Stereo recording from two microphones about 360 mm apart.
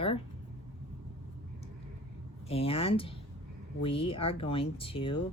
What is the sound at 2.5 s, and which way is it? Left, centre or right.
Speech, centre.